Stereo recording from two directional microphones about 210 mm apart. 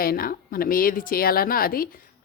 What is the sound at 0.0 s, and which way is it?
A woman's voice, 45° left (ahead or behind).